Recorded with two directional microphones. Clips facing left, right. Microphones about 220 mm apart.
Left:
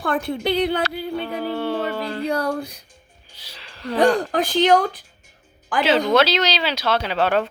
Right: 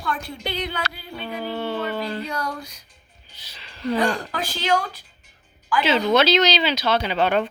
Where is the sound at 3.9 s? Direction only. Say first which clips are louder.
Left 6 dB; 35° left (ahead or behind).